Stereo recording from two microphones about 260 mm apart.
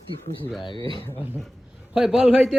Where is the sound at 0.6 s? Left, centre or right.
Centre.